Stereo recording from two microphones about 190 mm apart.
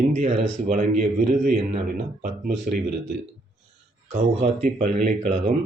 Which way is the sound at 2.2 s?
50° right (ahead or behind).